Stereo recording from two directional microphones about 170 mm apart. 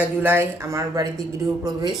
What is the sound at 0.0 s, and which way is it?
Speech, 10° right (ahead or behind).